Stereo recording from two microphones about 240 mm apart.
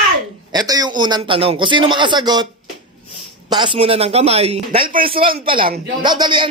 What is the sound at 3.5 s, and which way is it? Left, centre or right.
A man's voice, right.